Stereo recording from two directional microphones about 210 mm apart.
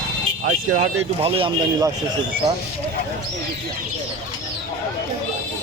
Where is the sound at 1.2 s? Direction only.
25° right (ahead or behind).